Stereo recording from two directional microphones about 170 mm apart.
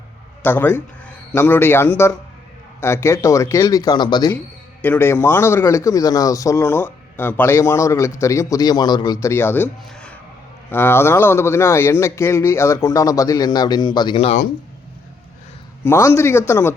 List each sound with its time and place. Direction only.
0.4 s a man's voice: 10° left (ahead or behind)
4.8 s speech: 10° left (ahead or behind)
9.2 s speech: 15° left (ahead or behind); by 14.3 s 30° left (ahead or behind)
15.8 s speech: 15° left (ahead or behind)